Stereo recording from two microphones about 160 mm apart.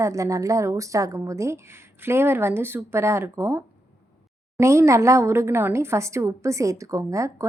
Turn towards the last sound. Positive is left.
turn(degrees=-20)  # may be behind; listen again after turning